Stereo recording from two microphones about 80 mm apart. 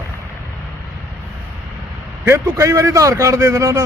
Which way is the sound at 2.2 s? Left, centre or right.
Right.